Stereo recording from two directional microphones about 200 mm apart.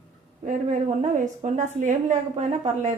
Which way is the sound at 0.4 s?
35° right (ahead or behind).